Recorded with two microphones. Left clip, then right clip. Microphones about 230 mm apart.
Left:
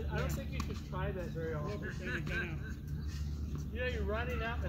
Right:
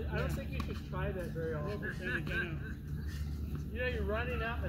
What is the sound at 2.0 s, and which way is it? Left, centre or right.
Speech, centre.